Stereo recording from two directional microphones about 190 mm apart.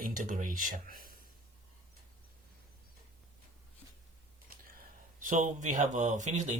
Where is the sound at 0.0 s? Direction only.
45° right (ahead or behind).